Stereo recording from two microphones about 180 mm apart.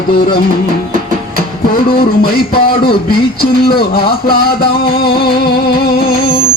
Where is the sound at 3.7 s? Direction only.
60° left (ahead or behind).